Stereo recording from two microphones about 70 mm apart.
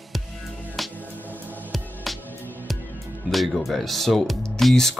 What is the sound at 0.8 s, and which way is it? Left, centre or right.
Music, centre.